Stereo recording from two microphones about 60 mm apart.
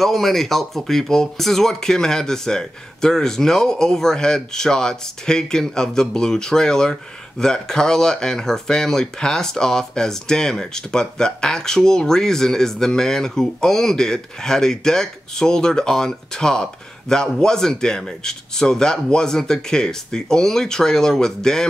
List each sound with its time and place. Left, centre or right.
0.0 s speech: centre